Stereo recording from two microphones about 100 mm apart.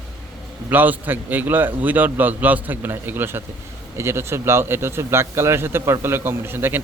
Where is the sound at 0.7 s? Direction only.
20° right (ahead or behind).